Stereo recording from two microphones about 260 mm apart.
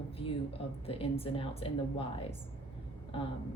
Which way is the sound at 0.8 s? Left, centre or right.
Left.